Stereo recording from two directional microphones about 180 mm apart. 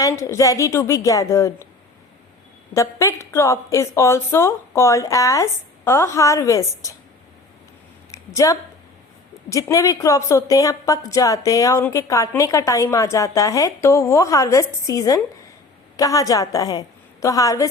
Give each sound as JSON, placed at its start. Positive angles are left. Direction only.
{"t": 0.0, "sound": "a woman's voice", "side_deg": 15}
{"t": 2.7, "sound": "a woman's voice", "side_deg": 15}
{"t": 8.1, "sound": "a sound", "side_deg": 20}
{"t": 9.5, "sound": "a woman's voice", "side_deg": 15}